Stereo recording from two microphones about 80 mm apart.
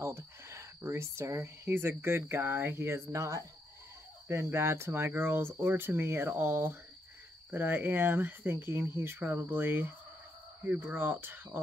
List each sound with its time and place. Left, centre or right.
0.0 s speech: right